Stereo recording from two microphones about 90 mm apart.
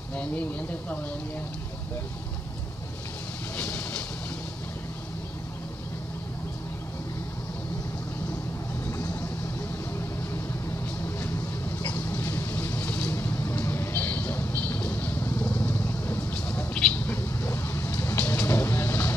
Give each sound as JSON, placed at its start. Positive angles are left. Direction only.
{"t": 0.1, "sound": "speech", "side_deg": 15}
{"t": 3.5, "sound": "vehicle", "side_deg": 15}
{"t": 8.9, "sound": "vehicle", "side_deg": 30}
{"t": 11.8, "sound": "vehicle", "side_deg": 20}